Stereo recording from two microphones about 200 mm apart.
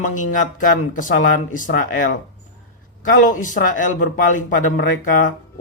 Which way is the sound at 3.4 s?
40° left (ahead or behind).